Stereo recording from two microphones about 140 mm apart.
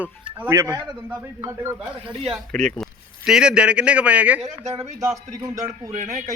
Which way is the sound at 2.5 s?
5° left (ahead or behind).